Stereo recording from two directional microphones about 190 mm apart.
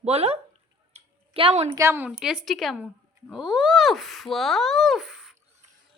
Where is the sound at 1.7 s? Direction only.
15° right (ahead or behind).